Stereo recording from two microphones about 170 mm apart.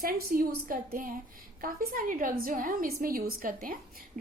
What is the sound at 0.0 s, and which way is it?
A woman's voice, 60° right (ahead or behind).